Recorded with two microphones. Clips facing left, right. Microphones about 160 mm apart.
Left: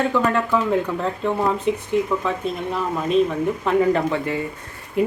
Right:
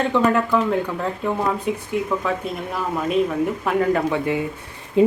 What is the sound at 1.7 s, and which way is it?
Speech, 5° right (ahead or behind).